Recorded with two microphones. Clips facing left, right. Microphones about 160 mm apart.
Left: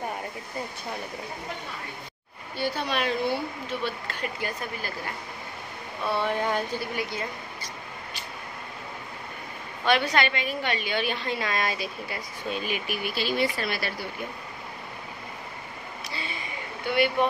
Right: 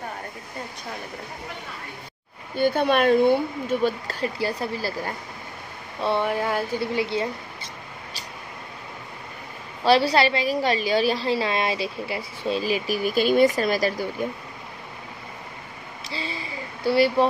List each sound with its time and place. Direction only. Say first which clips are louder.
2.5 s speech: right 8 dB; 50° right (ahead or behind); by 4.9 s 35° right (ahead or behind)
6.2 s speech: right 2 dB; 5° right (ahead or behind)
6.8 s mouse: right 7 dB; 25° right (ahead or behind)
9.8 s a woman's voice: right 6 dB; 35° right (ahead or behind)
16.0 s a sound: right 5 dB; 30° right (ahead or behind)